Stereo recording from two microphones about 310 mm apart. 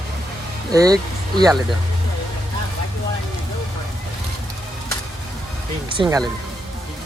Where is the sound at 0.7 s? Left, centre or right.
Centre.